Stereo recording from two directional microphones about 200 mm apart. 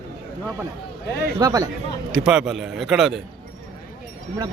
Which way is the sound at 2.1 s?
5° right (ahead or behind).